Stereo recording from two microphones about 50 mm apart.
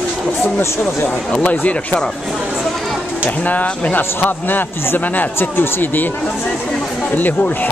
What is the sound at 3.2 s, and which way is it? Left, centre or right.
Speech, left.